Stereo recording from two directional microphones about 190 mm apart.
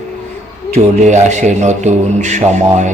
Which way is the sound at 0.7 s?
40° right (ahead or behind).